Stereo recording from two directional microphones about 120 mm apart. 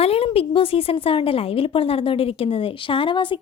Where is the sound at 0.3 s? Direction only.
50° left (ahead or behind).